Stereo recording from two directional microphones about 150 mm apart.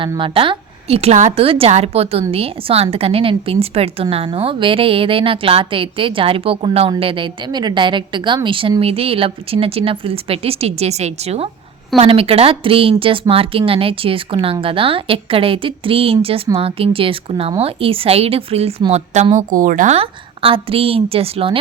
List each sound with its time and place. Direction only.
0.2 s a woman's voice: 35° right (ahead or behind); by 20.0 s 60° right (ahead or behind)
20.0 s a woman's voice: 40° right (ahead or behind)